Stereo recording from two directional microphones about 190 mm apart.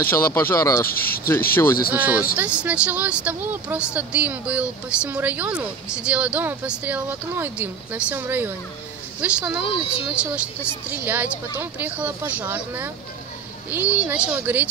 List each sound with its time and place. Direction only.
0.0 s speech: 10° left (ahead or behind)
0.8 s speech: 50° left (ahead or behind)
2.3 s speech: 5° right (ahead or behind)